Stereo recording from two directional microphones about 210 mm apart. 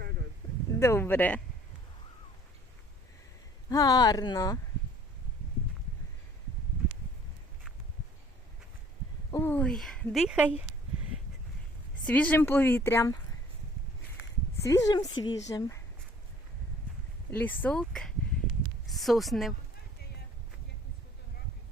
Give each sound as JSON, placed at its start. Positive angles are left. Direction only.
{"t": 0.8, "sound": "speech", "side_deg": 10}
{"t": 3.7, "sound": "speech", "side_deg": 20}
{"t": 9.3, "sound": "a woman's voice", "side_deg": 10}
{"t": 12.0, "sound": "speech", "side_deg": 5}
{"t": 14.6, "sound": "speech", "side_deg": 15}
{"t": 17.3, "sound": "a woman's voice", "side_deg": 10}